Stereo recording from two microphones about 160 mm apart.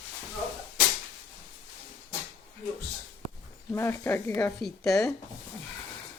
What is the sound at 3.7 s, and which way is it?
Speech, 15° left (ahead or behind).